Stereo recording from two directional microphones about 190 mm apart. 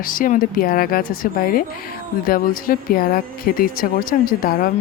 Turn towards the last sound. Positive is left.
turn(degrees=50)  # may be behind; listen again after turning